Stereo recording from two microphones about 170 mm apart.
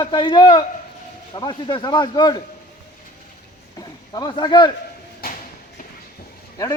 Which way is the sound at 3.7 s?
25° left (ahead or behind).